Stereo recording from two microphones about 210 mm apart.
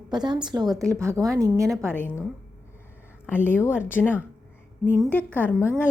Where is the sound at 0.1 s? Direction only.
20° right (ahead or behind).